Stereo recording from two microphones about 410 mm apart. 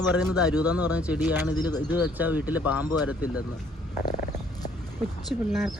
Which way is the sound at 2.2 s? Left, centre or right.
Centre.